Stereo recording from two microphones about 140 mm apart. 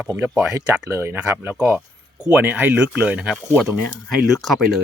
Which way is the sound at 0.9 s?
20° right (ahead or behind).